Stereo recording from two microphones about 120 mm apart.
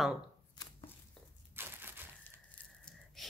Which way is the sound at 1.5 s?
20° right (ahead or behind).